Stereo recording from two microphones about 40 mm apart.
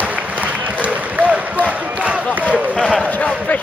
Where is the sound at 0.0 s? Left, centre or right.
Right.